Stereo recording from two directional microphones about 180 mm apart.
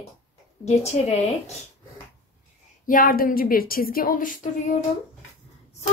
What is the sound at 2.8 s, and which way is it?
A woman's voice, 50° left (ahead or behind).